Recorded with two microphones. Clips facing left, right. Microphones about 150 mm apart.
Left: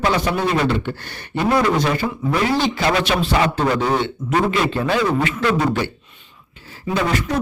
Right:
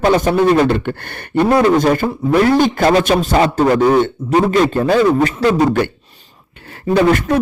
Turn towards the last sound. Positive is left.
turn(degrees=-60)  # may be behind; listen again after turning